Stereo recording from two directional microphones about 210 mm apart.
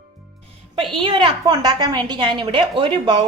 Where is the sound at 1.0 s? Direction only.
20° right (ahead or behind).